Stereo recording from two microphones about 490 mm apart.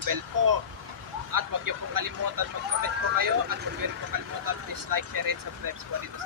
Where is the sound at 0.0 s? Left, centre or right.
Right.